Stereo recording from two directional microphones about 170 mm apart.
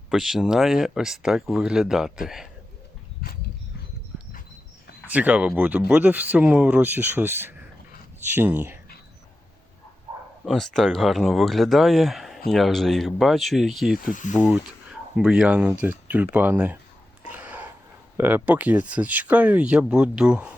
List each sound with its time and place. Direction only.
0.1 s speech: centre (ahead or behind)
5.0 s speech: 10° right (ahead or behind)
10.4 s speech: centre (ahead or behind)
14.0 s speech: 50° left (ahead or behind)
14.3 s speech: 10° right (ahead or behind)
17.2 s a sound: 10° right (ahead or behind)
18.2 s speech: 10° right (ahead or behind)